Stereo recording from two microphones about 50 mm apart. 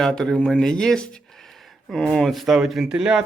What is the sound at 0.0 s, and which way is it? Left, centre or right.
Speech, centre.